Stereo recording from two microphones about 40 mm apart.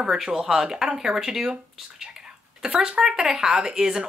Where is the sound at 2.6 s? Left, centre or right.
Right.